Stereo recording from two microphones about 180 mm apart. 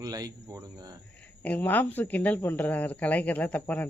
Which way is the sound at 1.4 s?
10° left (ahead or behind).